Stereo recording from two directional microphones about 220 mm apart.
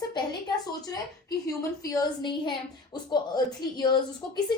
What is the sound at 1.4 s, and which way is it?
Speech, 20° left (ahead or behind).